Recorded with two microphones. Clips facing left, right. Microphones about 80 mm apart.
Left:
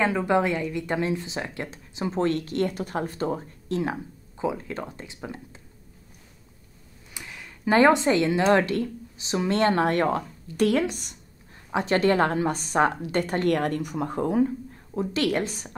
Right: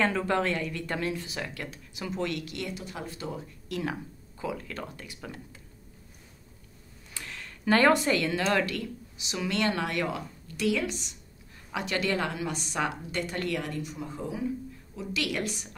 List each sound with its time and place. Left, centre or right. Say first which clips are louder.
0.0 s speech: left 4 dB; centre
7.2 s speech: left 1 dB; centre; by 11.1 s left
11.7 s speech: left 8 dB; left
13.5 s speech: left 8 dB; left